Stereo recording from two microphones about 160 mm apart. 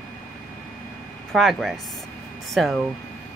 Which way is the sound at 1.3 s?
Centre (ahead or behind).